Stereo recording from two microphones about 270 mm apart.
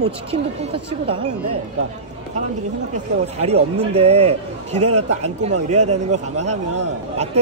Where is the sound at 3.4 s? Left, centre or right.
Right.